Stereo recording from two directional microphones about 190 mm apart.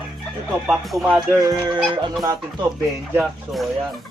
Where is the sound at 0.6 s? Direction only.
Centre (ahead or behind).